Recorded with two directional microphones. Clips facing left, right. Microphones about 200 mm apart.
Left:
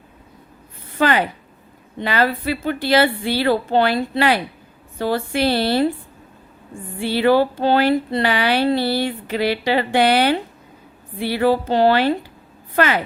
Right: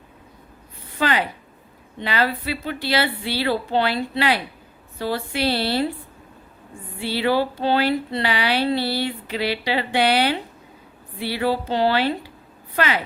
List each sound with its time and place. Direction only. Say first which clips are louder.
0.9 s speech: left 4 dB; 50° left (ahead or behind)
7.0 s speech: left 5 dB; 50° left (ahead or behind)